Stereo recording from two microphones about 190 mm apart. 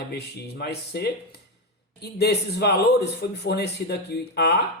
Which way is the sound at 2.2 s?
60° left (ahead or behind).